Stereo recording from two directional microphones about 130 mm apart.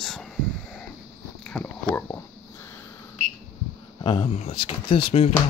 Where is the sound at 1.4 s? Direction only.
5° left (ahead or behind).